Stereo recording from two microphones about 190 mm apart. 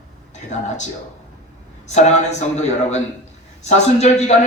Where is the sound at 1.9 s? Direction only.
35° left (ahead or behind).